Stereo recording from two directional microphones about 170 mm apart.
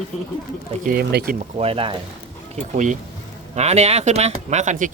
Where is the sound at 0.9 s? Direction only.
60° right (ahead or behind).